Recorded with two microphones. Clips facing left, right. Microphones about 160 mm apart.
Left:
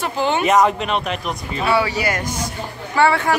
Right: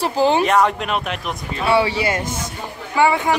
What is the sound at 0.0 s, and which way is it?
Speech, 35° right (ahead or behind).